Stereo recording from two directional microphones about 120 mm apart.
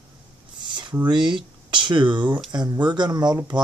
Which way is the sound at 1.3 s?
40° right (ahead or behind).